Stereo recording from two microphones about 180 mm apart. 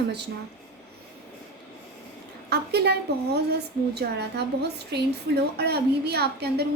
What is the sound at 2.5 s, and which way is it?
Speech, 65° right (ahead or behind).